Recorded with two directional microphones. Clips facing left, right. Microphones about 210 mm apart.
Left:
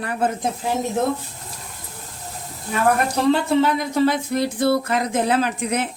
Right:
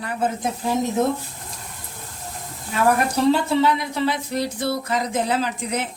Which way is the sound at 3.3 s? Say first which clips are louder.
Left 2 dB; 50° left (ahead or behind).